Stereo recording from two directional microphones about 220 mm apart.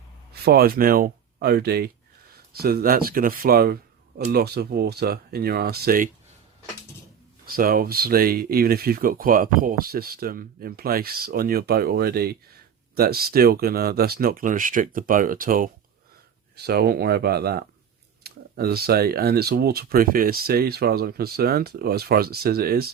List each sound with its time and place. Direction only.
0.4 s speech: 45° right (ahead or behind)
7.4 s speech: 40° right (ahead or behind)